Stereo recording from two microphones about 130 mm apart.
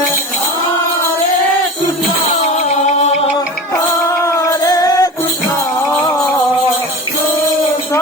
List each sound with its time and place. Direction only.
4.4 s music: 25° left (ahead or behind)